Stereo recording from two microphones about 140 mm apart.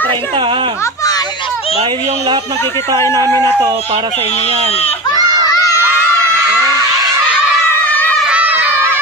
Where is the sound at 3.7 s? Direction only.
45° right (ahead or behind).